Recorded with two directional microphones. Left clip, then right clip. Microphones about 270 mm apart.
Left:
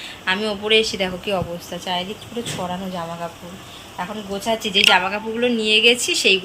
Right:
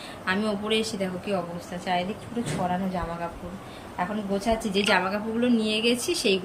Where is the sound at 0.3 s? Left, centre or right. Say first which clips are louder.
Left 7 dB; centre.